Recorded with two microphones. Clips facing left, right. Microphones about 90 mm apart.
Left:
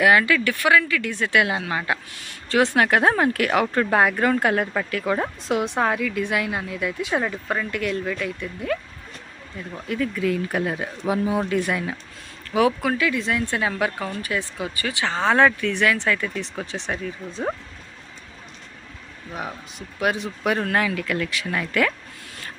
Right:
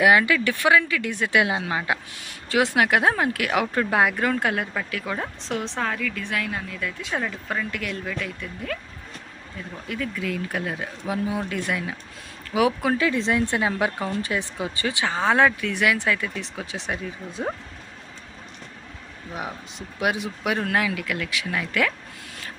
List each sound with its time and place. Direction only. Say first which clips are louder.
0.0 s speech: left 1 dB; 20° right (ahead or behind)
2.5 s speech: left 2 dB; 5° right (ahead or behind)
5.1 s a woman's voice: left 6 dB; 10° left (ahead or behind)
9.8 s speech: left 6 dB; centre (ahead or behind)
12.5 s speech: left 1 dB; 15° right (ahead or behind)
19.3 s speech: left 1 dB; 15° right (ahead or behind); by 21.9 s centre (ahead or behind)